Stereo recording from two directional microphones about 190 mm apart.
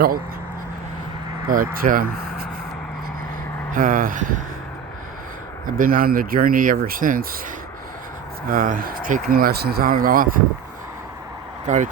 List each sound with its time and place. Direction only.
1.5 s speech: 50° right (ahead or behind)
3.7 s speech: 45° right (ahead or behind)
5.6 s speech: 45° right (ahead or behind)
8.4 s speech: 45° right (ahead or behind)
11.6 s speech: 40° right (ahead or behind)